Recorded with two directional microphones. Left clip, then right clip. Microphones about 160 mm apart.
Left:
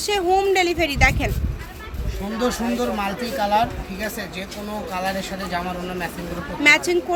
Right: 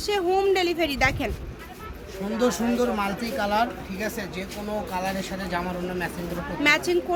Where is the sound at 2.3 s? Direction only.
20° right (ahead or behind).